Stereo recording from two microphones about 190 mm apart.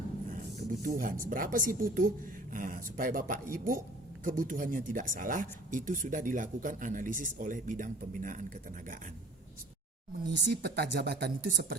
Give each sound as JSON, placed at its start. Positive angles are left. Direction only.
{"t": 0.3, "sound": "speech", "side_deg": -40}
{"t": 10.2, "sound": "speech", "side_deg": -65}